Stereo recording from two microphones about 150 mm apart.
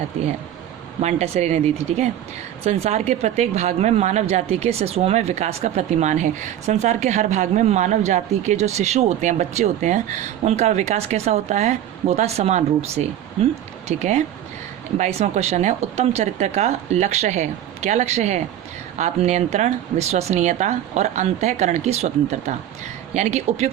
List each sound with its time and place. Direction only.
1.0 s speech: 45° right (ahead or behind)